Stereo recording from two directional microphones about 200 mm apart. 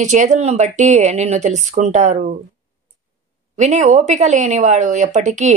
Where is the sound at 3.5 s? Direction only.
35° right (ahead or behind).